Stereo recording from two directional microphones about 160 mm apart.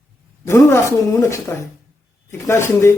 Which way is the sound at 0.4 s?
15° left (ahead or behind).